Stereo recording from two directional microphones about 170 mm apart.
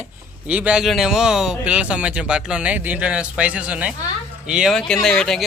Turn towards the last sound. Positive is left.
turn(degrees=5)  # may be behind; listen again after turning